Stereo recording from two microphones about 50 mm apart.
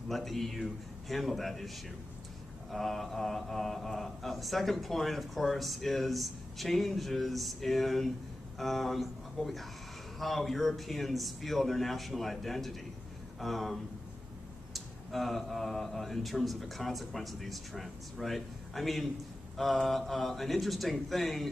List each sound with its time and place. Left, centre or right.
0.1 s speech: centre
2.7 s a man's voice: centre